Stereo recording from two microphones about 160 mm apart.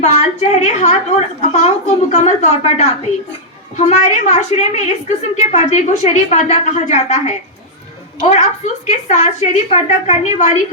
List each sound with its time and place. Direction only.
0.0 s a woman's voice: 45° left (ahead or behind)